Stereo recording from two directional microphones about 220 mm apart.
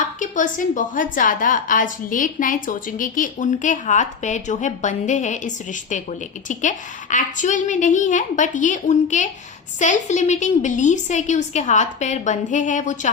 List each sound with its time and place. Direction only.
0.0 s a woman's voice: 35° left (ahead or behind)